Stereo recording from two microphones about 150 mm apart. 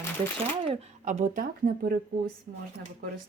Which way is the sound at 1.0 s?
55° right (ahead or behind).